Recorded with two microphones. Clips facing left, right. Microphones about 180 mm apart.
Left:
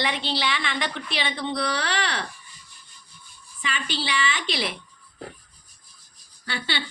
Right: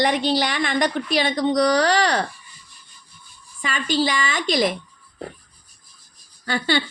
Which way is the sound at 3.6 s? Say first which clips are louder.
Right 8 dB; 45° right (ahead or behind).